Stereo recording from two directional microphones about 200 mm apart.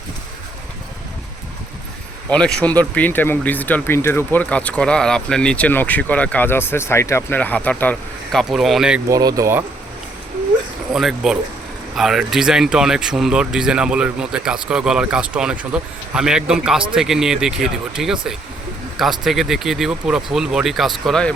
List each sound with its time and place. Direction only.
2.3 s speech: 5° left (ahead or behind)
9.0 s speech: 15° right (ahead or behind)
10.9 s speech: centre (ahead or behind)